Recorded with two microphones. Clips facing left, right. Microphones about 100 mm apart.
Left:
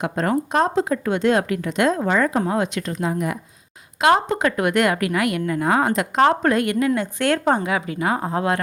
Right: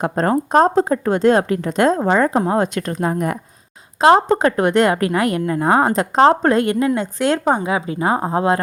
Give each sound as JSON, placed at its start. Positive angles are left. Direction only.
{"t": 0.0, "sound": "a woman's voice", "side_deg": -40}
{"t": 4.0, "sound": "a woman's voice", "side_deg": -35}